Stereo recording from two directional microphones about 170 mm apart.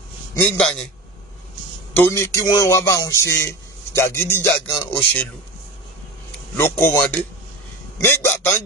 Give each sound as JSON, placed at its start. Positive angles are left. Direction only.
{"t": 0.6, "sound": "a man's voice", "side_deg": 5}
{"t": 1.5, "sound": "a sound", "side_deg": 15}
{"t": 2.5, "sound": "a man's voice", "side_deg": 20}
{"t": 6.8, "sound": "a man's voice", "side_deg": 15}